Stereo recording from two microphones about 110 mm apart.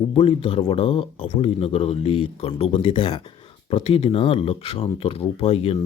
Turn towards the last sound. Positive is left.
turn(degrees=65)  # may be behind; listen again after turning